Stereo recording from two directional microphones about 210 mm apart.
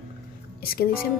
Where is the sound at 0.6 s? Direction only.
45° left (ahead or behind).